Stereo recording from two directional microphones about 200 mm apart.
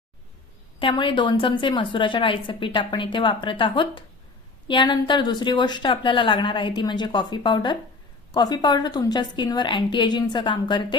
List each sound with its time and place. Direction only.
0.8 s a woman's voice: 25° left (ahead or behind)